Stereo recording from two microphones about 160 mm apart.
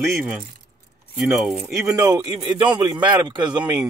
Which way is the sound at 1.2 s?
Centre (ahead or behind).